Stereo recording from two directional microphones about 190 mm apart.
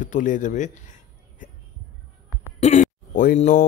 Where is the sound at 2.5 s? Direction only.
40° left (ahead or behind).